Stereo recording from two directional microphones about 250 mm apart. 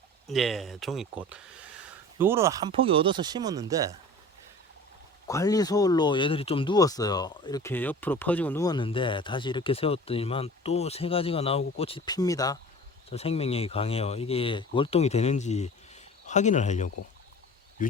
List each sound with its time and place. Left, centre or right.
0.3 s speech: centre
5.3 s speech: centre; by 17.9 s left